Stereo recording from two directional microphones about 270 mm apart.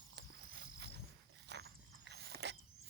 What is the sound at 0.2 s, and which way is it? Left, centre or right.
Frog, right.